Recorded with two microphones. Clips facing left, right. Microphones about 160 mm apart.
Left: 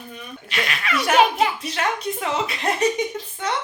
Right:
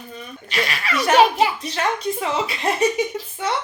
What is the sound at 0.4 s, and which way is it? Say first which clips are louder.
Speech: right 2 dB; centre (ahead or behind).